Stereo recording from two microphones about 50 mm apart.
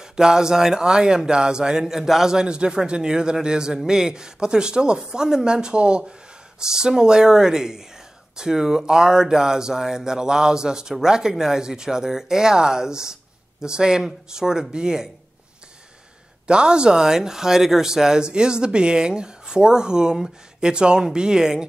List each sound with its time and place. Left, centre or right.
0.0 s speech: centre
16.4 s speech: centre